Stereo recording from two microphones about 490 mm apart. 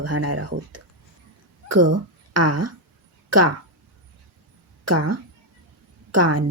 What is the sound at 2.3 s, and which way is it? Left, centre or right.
A woman's voice, right.